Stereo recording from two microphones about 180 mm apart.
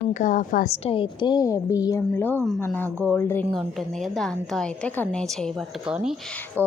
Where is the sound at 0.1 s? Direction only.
45° left (ahead or behind).